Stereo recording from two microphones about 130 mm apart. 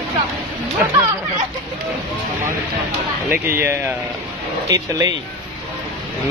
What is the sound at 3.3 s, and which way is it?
Speech, 20° right (ahead or behind).